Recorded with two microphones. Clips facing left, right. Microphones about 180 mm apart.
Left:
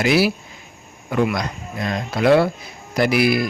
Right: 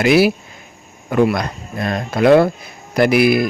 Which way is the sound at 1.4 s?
55° right (ahead or behind).